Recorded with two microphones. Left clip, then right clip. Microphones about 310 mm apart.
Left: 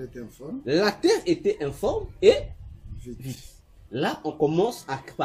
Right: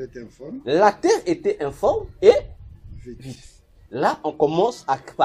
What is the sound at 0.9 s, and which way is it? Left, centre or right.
Speech, right.